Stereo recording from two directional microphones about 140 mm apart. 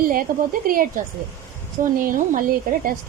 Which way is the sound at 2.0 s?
75° right (ahead or behind).